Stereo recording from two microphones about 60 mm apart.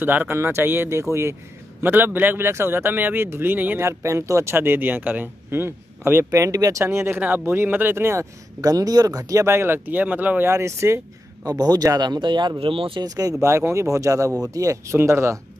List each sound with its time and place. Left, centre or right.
0.0 s speech: right
3.8 s speech: right
4.6 s speech: right
6.3 s speech: right
6.8 s speech: right
7.2 s speech: right
8.5 s speech: right
9.5 s speech: right
10.5 s speech: right
11.4 s speech: right
13.0 s speech: right
13.4 s speech: right
14.5 s speech: right
14.9 s speech: right